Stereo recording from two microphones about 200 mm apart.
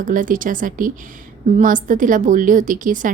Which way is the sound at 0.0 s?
40° right (ahead or behind).